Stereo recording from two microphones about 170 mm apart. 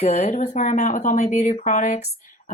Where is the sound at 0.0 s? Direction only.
40° left (ahead or behind).